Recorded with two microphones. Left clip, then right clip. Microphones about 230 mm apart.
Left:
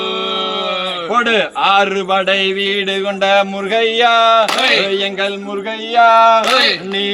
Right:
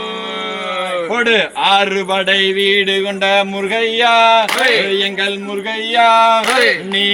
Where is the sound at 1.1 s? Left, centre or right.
Centre.